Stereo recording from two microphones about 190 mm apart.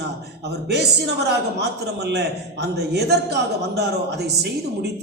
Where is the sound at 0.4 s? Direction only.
60° right (ahead or behind).